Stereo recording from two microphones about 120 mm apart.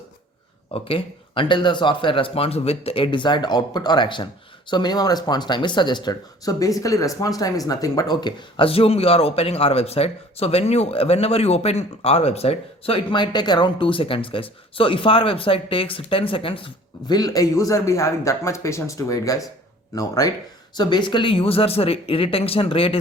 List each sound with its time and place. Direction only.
0.7 s speech: 50° left (ahead or behind)
17.2 s speech: 30° left (ahead or behind)
20.7 s speech: 40° left (ahead or behind)